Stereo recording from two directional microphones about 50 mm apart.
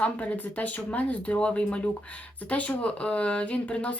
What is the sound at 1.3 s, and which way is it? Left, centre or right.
Speech, left.